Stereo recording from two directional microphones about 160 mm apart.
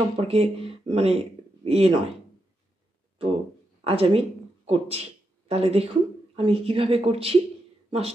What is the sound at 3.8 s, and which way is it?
Speech, 35° right (ahead or behind).